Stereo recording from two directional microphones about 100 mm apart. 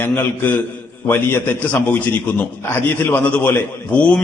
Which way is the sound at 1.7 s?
15° left (ahead or behind).